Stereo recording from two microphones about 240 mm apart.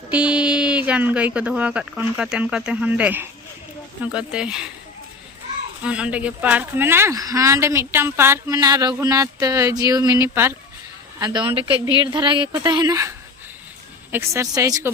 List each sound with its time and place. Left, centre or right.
0.1 s speech: centre
5.8 s speech: centre